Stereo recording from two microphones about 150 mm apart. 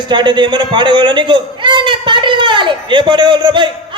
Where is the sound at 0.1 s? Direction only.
30° right (ahead or behind).